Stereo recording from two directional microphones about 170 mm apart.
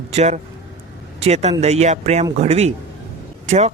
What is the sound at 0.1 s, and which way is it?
A man's voice, 40° right (ahead or behind).